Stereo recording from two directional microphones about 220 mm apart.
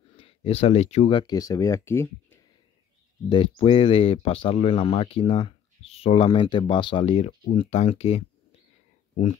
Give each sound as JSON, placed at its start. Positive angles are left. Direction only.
{"t": 0.1, "sound": "speech", "side_deg": 25}
{"t": 3.3, "sound": "speech", "side_deg": 25}